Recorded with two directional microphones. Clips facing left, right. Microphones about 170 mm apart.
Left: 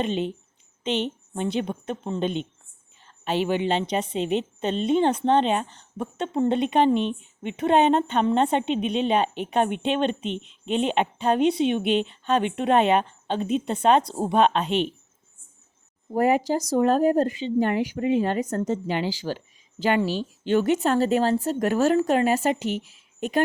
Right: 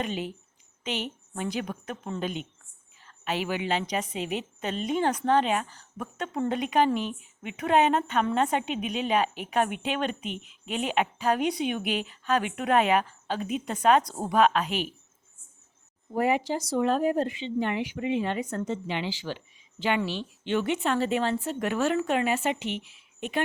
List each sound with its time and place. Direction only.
0.0 s a woman's voice: 25° left (ahead or behind)
16.1 s speech: 40° left (ahead or behind)